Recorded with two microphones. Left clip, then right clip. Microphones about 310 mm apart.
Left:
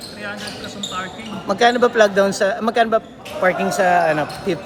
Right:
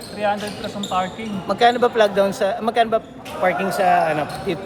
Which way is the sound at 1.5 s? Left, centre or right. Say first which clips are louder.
Left 1 dB; left.